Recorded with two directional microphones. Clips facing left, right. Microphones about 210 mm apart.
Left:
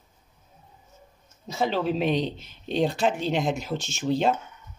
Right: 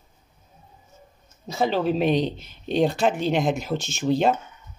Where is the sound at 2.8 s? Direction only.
55° right (ahead or behind).